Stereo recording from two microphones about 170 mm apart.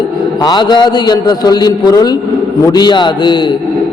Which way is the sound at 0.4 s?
25° left (ahead or behind).